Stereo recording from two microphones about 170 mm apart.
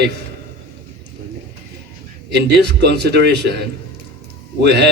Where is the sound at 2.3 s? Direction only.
80° right.